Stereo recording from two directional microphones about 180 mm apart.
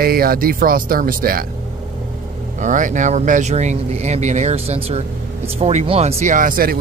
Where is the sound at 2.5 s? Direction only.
45° right (ahead or behind).